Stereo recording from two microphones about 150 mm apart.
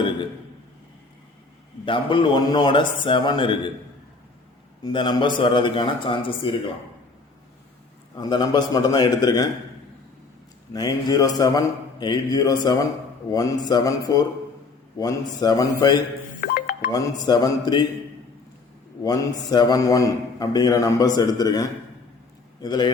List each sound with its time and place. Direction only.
1.8 s speech: 35° left (ahead or behind)
4.8 s speech: 30° left (ahead or behind)
8.1 s a man's voice: 30° left (ahead or behind)
10.7 s a man's voice: 25° left (ahead or behind)
16.4 s music: 60° left (ahead or behind)
16.9 s a man's voice: 25° left (ahead or behind)
19.0 s a man's voice: 25° left (ahead or behind)